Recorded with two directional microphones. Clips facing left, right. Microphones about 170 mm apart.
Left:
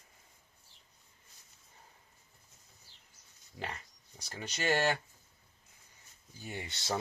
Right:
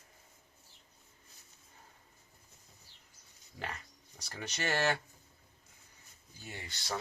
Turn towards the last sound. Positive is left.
turn(degrees=20)  # may be behind; listen again after turning